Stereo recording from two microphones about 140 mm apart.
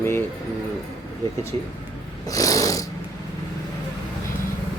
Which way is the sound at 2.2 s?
25° left (ahead or behind).